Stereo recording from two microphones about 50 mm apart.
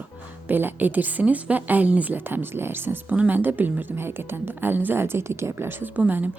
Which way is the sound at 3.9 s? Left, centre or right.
Right.